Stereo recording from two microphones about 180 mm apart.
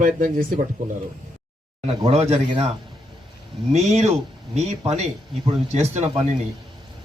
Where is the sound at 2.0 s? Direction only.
35° right (ahead or behind).